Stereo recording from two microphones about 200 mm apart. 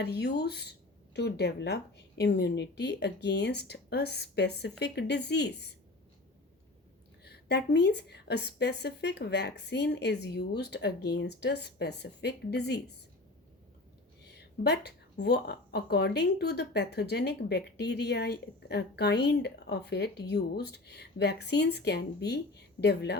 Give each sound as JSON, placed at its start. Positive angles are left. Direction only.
{"t": 0.0, "sound": "a woman's voice", "side_deg": 55}
{"t": 7.3, "sound": "a woman's voice", "side_deg": 55}
{"t": 14.3, "sound": "a woman's voice", "side_deg": 55}